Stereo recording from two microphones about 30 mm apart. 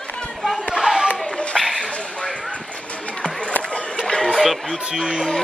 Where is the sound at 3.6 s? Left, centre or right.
Left.